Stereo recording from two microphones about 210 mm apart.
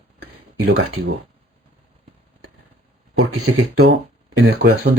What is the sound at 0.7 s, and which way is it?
Speech, 65° right (ahead or behind).